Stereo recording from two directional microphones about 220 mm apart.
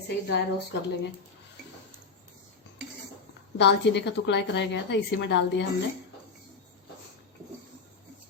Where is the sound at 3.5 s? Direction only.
50° left (ahead or behind).